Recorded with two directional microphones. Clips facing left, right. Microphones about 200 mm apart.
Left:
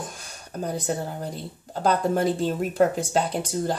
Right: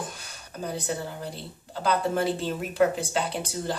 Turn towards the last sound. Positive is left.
turn(degrees=40)  # may be behind; listen again after turning